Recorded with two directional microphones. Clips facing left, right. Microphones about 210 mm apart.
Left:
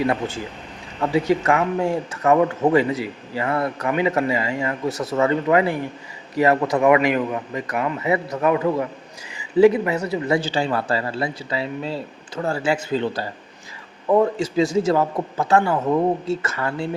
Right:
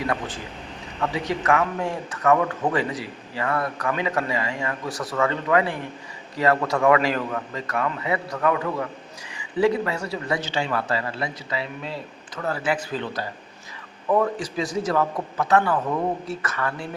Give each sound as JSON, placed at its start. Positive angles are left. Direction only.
{"t": 1.0, "sound": "speech", "side_deg": 25}